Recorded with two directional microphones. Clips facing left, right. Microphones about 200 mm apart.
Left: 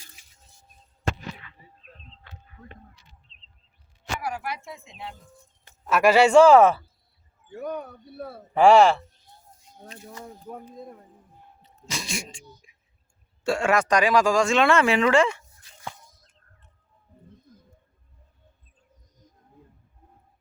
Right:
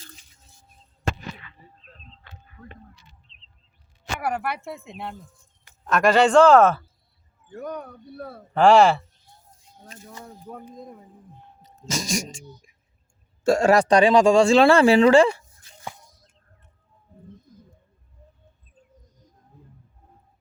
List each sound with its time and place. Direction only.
3.3 s a sound: 40° left (ahead or behind)
4.2 s speech: 60° right (ahead or behind)
5.8 s speech: 5° left (ahead or behind)
10.5 s speech: 5° left (ahead or behind)
11.6 s speech: 45° right (ahead or behind)
15.8 s a sound: 10° right (ahead or behind)